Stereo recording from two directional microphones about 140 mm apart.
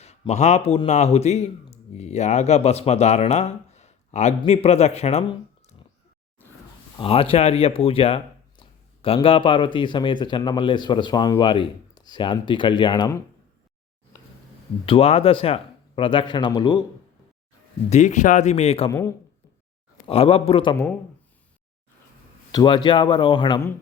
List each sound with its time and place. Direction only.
0.0 s speech: 50° left (ahead or behind)
7.0 s speech: 40° left (ahead or behind); by 13.2 s 25° left (ahead or behind)
14.8 s speech: 45° left (ahead or behind)
17.8 s speech: 55° left (ahead or behind)
18.9 s a man's voice: 20° left (ahead or behind)
20.1 s speech: 45° left (ahead or behind)
22.5 s speech: 35° left (ahead or behind)